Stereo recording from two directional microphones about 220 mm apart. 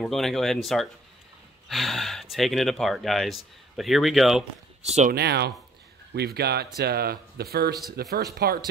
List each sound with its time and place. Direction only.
0.0 s speech: centre (ahead or behind)
4.8 s speech: 30° right (ahead or behind)
5.1 s speech: 50° right (ahead or behind)